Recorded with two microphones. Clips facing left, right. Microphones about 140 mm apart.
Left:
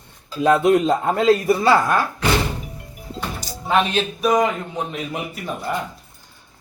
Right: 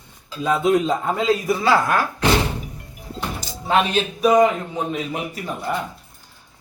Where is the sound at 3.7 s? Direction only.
5° right (ahead or behind).